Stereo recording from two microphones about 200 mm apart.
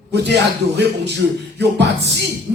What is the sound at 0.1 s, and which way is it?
Speech, 55° right (ahead or behind).